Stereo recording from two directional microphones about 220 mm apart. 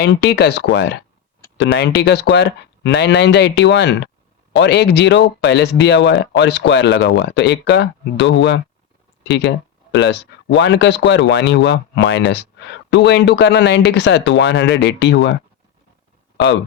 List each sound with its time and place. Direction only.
0.0 s speech: 50° left (ahead or behind)